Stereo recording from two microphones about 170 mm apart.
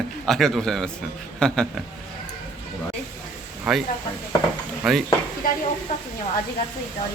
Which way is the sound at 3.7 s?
5° right (ahead or behind).